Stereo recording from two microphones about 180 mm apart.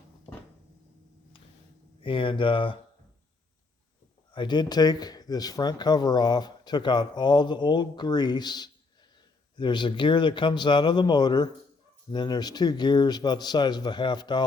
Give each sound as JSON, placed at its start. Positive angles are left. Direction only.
{"t": 2.0, "sound": "speech", "side_deg": 30}
{"t": 4.3, "sound": "speech", "side_deg": 25}